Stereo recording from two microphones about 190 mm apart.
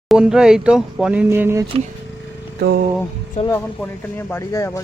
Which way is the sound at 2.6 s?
60° right (ahead or behind).